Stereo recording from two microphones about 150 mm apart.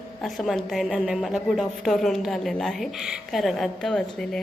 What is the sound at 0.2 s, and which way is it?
A woman's voice, centre (ahead or behind).